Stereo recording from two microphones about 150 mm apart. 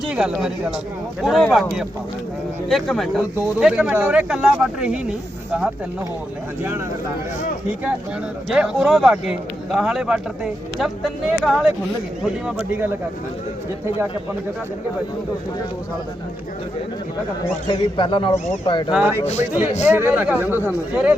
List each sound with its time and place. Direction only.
0.1 s a man's voice: 5° right (ahead or behind)
8.4 s a man's voice: 5° right (ahead or behind)
17.9 s speech: 35° left (ahead or behind)
18.9 s a man's voice: 5° right (ahead or behind)
19.2 s speech: 50° left (ahead or behind)
19.8 s a man's voice: 15° right (ahead or behind)